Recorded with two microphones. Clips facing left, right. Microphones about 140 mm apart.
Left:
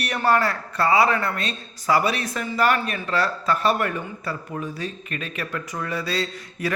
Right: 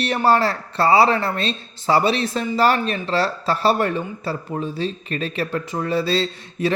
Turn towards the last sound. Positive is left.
turn(degrees=-25)  # may be behind; listen again after turning